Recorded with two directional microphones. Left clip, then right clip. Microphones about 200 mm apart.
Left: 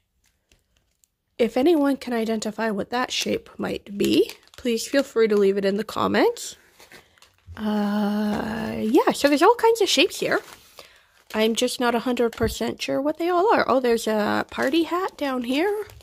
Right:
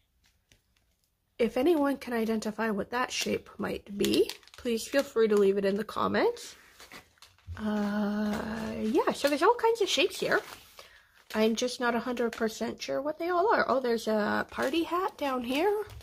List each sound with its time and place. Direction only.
1.3 s speech: 45° left (ahead or behind)